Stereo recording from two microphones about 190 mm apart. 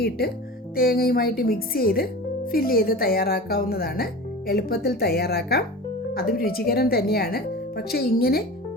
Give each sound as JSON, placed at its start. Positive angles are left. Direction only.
{"t": 0.8, "sound": "speech", "side_deg": 50}